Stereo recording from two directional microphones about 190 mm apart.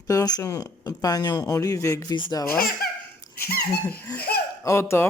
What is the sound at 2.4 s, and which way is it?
Speech, 50° left (ahead or behind).